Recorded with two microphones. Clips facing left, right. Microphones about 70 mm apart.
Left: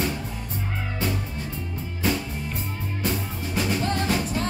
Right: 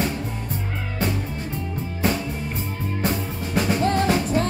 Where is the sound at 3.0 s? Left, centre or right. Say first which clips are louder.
Right 2 dB; right.